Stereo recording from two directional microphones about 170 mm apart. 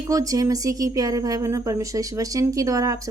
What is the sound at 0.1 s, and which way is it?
A woman's voice, 20° right (ahead or behind).